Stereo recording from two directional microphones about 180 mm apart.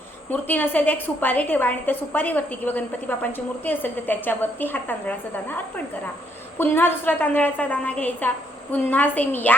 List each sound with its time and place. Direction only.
0.3 s a woman's voice: 10° left (ahead or behind)